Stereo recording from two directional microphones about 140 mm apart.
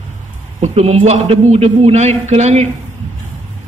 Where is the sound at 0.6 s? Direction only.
50° right (ahead or behind).